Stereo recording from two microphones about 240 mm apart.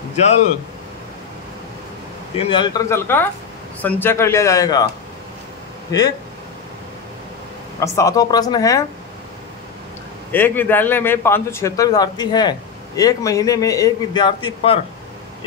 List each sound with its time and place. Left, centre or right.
0.1 s speech: left
2.3 s speech: left
5.9 s speech: centre
7.8 s speech: centre
10.3 s speech: centre